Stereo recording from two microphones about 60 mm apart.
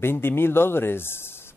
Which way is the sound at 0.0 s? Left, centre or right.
Left.